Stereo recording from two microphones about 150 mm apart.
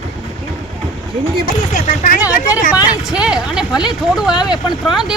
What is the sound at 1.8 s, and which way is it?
Speech, 65° left (ahead or behind).